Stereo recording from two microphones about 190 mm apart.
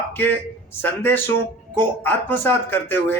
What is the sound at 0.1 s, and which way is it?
Speech, 10° left (ahead or behind).